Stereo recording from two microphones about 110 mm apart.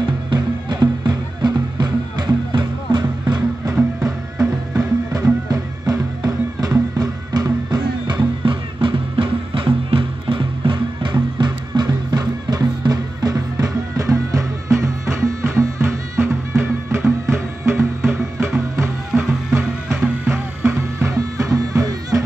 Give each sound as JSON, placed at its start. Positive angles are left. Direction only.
{"t": 0.0, "sound": "music", "side_deg": -45}
{"t": 3.7, "sound": "music", "side_deg": -5}
{"t": 5.1, "sound": "music", "side_deg": -35}
{"t": 19.9, "sound": "music", "side_deg": -20}